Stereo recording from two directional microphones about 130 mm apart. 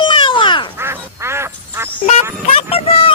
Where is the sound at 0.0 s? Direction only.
40° left (ahead or behind).